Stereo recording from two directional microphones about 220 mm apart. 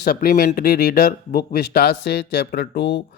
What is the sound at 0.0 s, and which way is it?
Speech, 45° left (ahead or behind).